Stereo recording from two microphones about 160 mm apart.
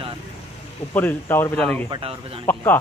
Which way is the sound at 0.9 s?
15° left (ahead or behind).